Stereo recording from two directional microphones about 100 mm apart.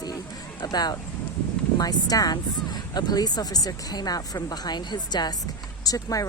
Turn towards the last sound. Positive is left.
turn(degrees=35)  # may be behind; listen again after turning